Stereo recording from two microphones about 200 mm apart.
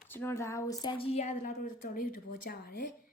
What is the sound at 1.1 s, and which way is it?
A woman's voice, 35° left (ahead or behind).